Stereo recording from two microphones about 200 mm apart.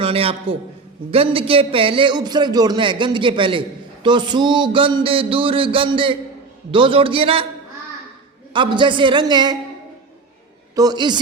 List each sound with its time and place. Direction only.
0.0 s a man's voice: 30° right (ahead or behind)
8.5 s a man's voice: 25° right (ahead or behind)
10.8 s a man's voice: 20° right (ahead or behind)